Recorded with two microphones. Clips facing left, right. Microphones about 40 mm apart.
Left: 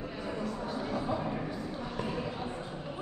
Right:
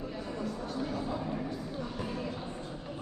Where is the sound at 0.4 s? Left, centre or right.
Centre.